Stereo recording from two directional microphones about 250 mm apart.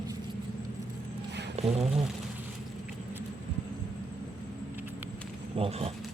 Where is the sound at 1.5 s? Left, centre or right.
Right.